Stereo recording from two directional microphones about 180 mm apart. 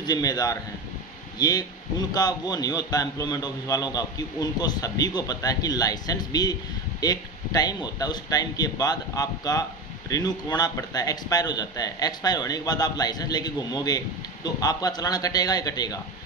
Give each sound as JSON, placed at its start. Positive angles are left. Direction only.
{"t": 0.0, "sound": "a man's voice", "side_deg": 20}